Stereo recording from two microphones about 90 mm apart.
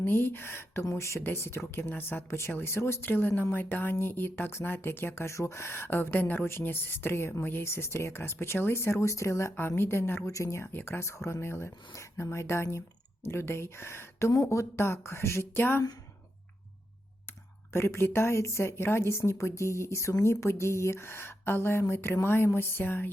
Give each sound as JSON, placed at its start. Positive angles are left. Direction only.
{"t": 0.0, "sound": "speech", "side_deg": 25}
{"t": 17.7, "sound": "speech", "side_deg": 30}